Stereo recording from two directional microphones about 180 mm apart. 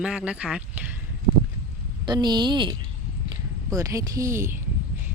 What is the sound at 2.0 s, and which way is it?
A woman's voice, 25° right (ahead or behind).